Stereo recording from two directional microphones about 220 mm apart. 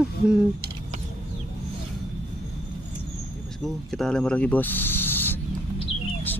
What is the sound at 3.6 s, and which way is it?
Speech, centre (ahead or behind).